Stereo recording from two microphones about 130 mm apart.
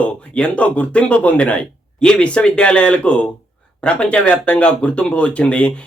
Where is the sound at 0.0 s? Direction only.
10° left (ahead or behind).